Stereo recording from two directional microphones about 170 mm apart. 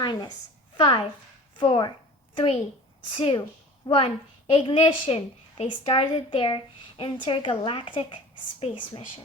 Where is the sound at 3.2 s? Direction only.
30° left (ahead or behind).